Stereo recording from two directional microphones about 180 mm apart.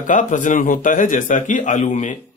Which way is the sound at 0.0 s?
45° left (ahead or behind).